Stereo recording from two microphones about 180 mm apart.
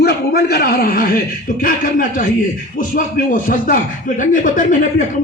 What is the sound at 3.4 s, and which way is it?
A man's voice, 50° left (ahead or behind).